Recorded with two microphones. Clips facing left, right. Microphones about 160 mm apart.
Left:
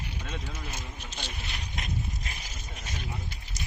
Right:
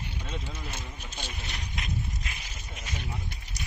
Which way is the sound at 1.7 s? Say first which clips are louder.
Even; 40° left (ahead or behind).